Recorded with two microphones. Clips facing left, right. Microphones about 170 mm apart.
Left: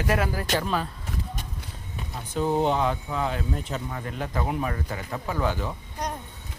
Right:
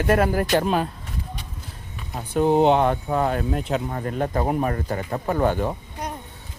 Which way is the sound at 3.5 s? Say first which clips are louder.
Right 7 dB; 70° right (ahead or behind).